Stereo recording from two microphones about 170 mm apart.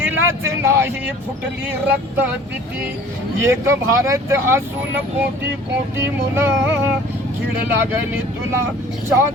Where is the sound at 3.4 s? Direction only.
15° right (ahead or behind).